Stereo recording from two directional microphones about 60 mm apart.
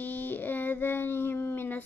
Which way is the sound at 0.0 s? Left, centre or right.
Left.